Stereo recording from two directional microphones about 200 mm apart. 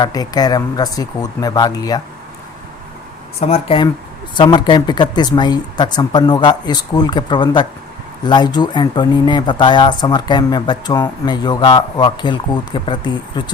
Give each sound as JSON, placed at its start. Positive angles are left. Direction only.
{"t": 0.0, "sound": "speech", "side_deg": 20}
{"t": 3.4, "sound": "speech", "side_deg": 30}